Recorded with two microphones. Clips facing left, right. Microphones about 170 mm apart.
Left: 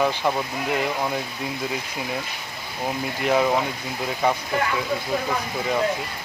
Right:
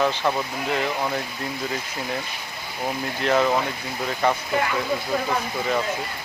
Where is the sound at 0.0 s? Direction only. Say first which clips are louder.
Even; 10° left (ahead or behind).